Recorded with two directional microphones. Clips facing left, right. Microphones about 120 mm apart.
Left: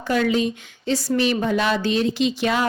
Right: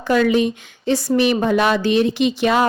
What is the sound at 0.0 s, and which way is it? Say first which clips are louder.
Speech: right 4 dB; 65° right (ahead or behind).